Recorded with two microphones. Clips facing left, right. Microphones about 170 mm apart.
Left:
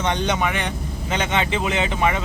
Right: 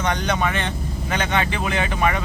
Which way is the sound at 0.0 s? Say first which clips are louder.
Even; 20° left (ahead or behind).